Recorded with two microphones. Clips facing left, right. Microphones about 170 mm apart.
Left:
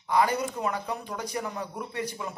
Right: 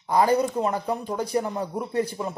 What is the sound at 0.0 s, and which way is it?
A man's voice, 35° right (ahead or behind).